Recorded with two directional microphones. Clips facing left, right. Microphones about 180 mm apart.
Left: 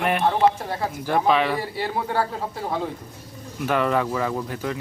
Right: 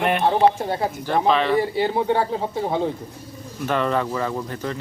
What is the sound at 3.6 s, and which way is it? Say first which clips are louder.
Speech: even; 5° left (ahead or behind).